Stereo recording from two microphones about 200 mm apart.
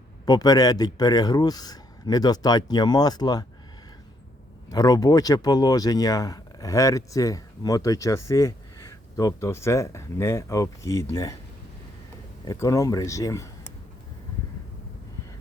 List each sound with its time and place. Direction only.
0.3 s speech: 20° left (ahead or behind)
4.7 s speech: 20° left (ahead or behind)
12.5 s speech: 15° left (ahead or behind)